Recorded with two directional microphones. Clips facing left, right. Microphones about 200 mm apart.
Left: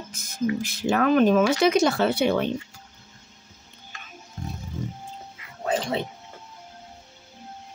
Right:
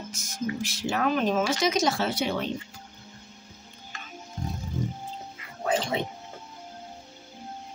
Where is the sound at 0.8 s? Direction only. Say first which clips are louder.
Left 7 dB; 55° left (ahead or behind).